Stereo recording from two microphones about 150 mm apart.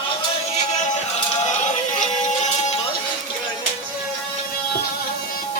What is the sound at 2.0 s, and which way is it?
Music, 50° left (ahead or behind).